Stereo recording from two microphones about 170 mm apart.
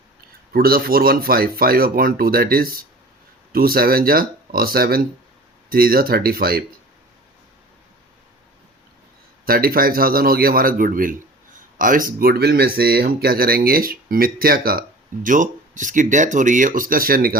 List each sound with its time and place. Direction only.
0.5 s speech: 60° right (ahead or behind)
9.5 s speech: 60° right (ahead or behind)